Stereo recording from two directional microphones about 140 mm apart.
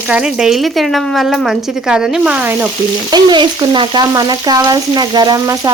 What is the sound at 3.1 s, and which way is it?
Speech, 30° right (ahead or behind).